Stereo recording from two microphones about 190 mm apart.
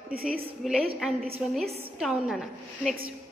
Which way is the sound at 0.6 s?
Centre (ahead or behind).